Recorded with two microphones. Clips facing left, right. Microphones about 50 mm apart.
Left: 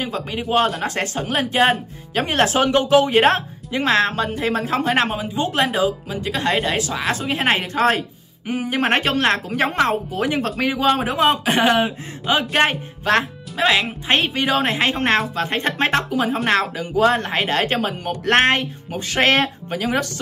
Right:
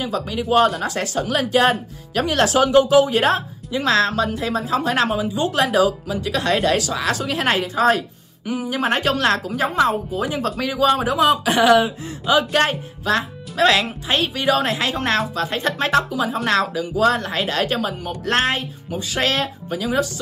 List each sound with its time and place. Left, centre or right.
0.0 s speech: left
7.6 s speech: left
9.5 s speech: left
10.6 s speech: left
13.6 s speech: centre
14.0 s speech: left